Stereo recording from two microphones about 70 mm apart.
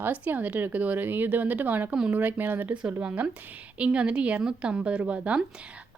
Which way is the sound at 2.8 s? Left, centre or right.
Centre.